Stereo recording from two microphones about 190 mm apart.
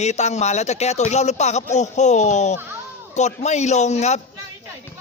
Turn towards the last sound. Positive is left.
turn(degrees=35)  # may be behind; listen again after turning